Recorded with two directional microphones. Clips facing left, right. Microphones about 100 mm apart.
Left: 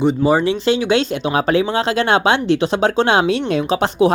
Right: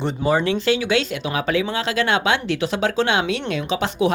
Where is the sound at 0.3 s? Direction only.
20° left (ahead or behind).